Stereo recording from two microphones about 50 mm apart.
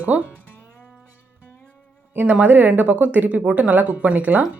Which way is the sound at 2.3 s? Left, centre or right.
Right.